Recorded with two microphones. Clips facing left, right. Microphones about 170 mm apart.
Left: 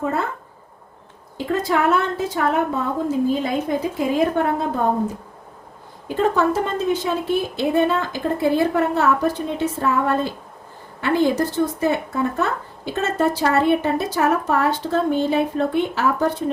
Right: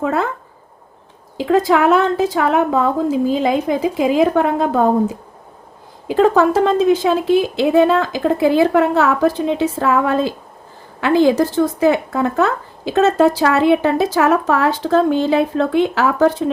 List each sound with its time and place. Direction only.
0.0 s speech: 90° right
1.4 s speech: 90° right
6.1 s speech: 90° right